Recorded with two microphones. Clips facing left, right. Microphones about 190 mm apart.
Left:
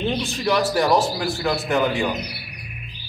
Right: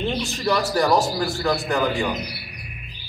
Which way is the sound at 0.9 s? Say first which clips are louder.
Even; 15° left (ahead or behind).